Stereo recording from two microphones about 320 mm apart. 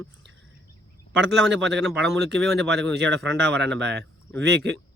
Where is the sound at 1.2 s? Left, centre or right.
Right.